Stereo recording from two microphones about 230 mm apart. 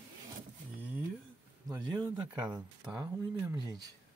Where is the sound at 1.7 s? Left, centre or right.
Centre.